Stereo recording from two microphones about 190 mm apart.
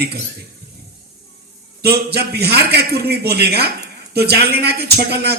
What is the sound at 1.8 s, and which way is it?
A man's voice, 60° right (ahead or behind).